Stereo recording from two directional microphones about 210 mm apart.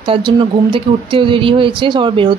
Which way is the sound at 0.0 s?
25° right (ahead or behind).